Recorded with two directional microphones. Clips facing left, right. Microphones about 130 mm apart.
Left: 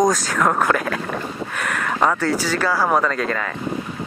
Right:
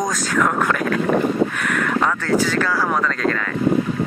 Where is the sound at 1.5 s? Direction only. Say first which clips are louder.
Right 3 dB; 5° left (ahead or behind).